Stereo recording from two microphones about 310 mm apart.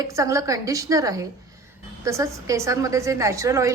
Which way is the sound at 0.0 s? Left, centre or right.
Centre.